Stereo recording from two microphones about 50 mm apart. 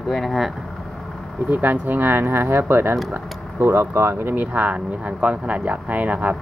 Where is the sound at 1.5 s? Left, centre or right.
Right.